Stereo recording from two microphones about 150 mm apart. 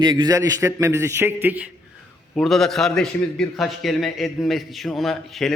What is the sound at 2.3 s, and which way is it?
A man's voice, 5° left (ahead or behind).